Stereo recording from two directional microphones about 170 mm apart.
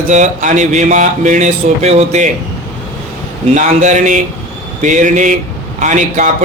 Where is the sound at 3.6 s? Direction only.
45° right (ahead or behind).